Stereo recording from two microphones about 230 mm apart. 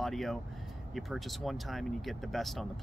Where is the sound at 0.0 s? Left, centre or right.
Centre.